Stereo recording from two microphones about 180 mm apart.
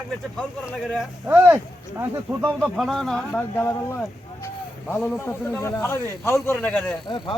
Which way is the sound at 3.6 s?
15° left (ahead or behind).